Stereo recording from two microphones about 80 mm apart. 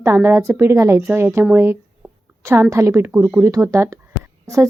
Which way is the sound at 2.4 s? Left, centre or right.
Right.